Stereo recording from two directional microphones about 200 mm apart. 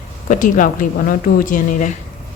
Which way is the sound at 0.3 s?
40° left (ahead or behind).